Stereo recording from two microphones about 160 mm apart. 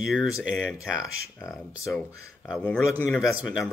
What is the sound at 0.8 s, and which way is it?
Speech, 5° right (ahead or behind).